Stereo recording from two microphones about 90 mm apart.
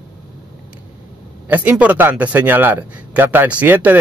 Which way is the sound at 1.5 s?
20° right (ahead or behind).